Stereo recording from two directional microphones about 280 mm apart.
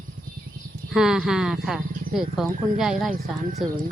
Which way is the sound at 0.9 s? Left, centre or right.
Centre.